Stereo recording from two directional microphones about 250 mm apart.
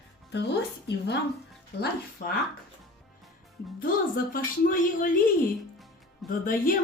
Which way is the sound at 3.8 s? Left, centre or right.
Left.